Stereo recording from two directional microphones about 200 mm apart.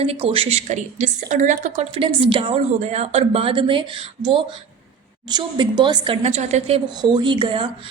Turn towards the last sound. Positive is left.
turn(degrees=-25)  # may be behind; listen again after turning